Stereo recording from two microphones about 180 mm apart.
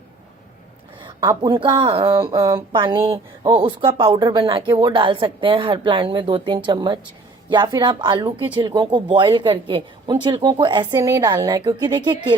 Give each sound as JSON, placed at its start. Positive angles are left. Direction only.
{"t": 1.0, "sound": "speech", "side_deg": -25}